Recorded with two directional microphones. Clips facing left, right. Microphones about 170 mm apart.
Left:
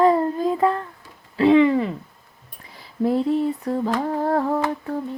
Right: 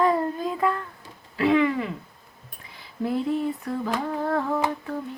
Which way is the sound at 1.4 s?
30° left (ahead or behind).